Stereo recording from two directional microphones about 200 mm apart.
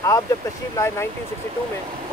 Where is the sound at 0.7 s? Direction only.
10° left (ahead or behind).